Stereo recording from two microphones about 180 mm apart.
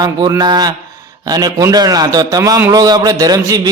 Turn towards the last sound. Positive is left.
turn(degrees=-20)  # may be behind; listen again after turning